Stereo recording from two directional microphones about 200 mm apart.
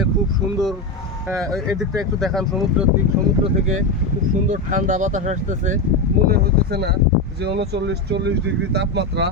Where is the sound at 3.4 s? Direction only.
35° right (ahead or behind).